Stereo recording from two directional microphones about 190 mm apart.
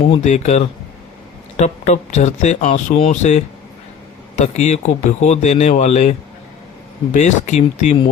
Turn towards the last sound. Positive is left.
turn(degrees=40)  # may be behind; listen again after turning